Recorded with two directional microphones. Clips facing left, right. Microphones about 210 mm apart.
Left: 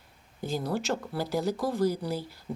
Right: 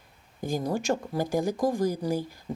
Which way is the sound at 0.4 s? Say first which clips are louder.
Right 3 dB; 15° right (ahead or behind).